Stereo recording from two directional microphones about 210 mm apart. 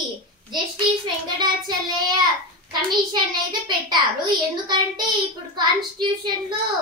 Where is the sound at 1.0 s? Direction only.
20° right (ahead or behind).